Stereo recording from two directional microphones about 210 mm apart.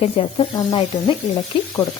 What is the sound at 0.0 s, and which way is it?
Speech, 25° left (ahead or behind).